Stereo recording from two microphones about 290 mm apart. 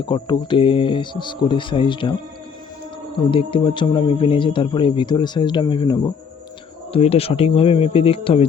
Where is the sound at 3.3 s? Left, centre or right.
Centre.